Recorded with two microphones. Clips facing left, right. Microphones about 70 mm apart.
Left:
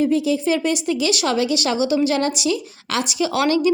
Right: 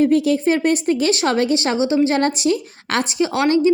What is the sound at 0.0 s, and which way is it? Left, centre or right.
Speech, right.